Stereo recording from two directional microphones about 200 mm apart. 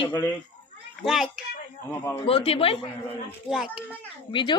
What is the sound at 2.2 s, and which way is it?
Speech, 30° left (ahead or behind).